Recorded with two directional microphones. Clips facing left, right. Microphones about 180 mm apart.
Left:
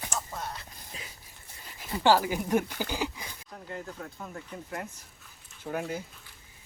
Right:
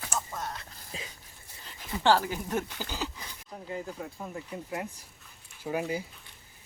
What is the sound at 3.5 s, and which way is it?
Speech, 10° right (ahead or behind).